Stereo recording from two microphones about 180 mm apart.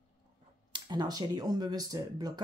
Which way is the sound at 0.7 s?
25° right (ahead or behind).